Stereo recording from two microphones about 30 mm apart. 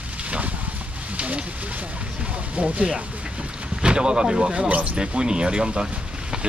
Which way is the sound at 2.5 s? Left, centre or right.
Right.